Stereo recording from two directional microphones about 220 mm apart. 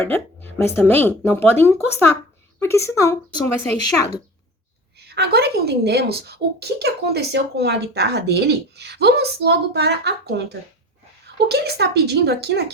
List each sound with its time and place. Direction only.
0.0 s speech: 10° left (ahead or behind)
5.0 s a woman's voice: 45° right (ahead or behind)